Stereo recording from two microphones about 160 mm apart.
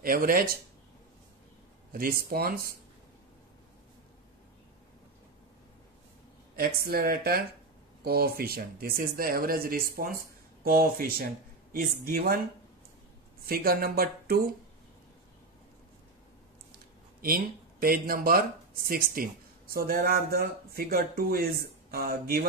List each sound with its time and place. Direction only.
0.0 s speech: 65° right (ahead or behind)
1.9 s speech: 65° right (ahead or behind)
6.5 s speech: 70° right (ahead or behind)
13.5 s speech: 70° right (ahead or behind)
17.2 s speech: 65° right (ahead or behind)